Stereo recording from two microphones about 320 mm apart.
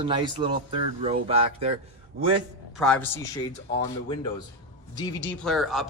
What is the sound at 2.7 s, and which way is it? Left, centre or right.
Speech, centre.